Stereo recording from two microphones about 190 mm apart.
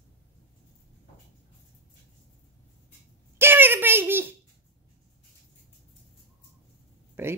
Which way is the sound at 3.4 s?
10° right (ahead or behind).